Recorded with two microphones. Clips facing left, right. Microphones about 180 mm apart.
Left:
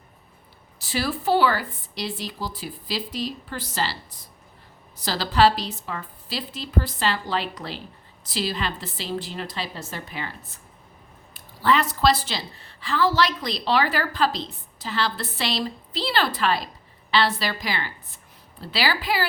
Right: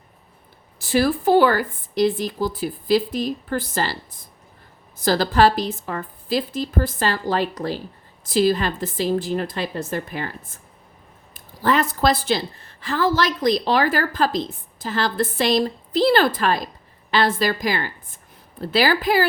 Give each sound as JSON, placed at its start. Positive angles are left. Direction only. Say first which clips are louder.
{"t": 0.8, "sound": "a woman's voice", "louder": "right 8 dB", "side_deg": -50}
{"t": 11.3, "sound": "a woman's voice", "louder": "right 2 dB", "side_deg": -45}